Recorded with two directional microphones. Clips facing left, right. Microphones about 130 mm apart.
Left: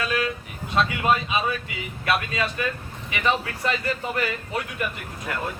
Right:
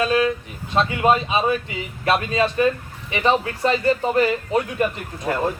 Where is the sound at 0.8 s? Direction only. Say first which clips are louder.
Right 4 dB; 30° right (ahead or behind).